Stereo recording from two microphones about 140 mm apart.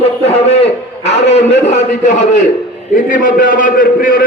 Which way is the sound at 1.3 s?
55° left (ahead or behind).